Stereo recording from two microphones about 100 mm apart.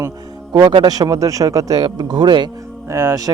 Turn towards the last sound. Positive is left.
turn(degrees=-30)  # may be behind; listen again after turning